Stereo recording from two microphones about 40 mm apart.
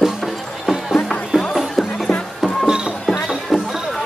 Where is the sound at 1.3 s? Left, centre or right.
Centre.